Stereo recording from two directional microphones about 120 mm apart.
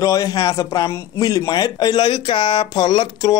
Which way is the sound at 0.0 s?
30° left (ahead or behind).